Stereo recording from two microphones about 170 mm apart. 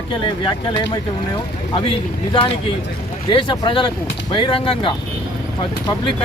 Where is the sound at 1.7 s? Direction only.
30° left (ahead or behind).